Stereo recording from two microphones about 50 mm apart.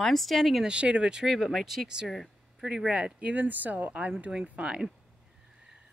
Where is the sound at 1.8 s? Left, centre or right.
Centre.